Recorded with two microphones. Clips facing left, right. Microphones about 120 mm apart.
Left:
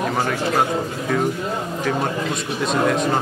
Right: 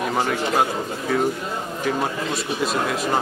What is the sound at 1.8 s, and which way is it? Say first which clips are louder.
A man's voice: left 1 dB; 5° right (ahead or behind).